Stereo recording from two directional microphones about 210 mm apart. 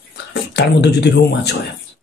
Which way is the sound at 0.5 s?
50° left (ahead or behind).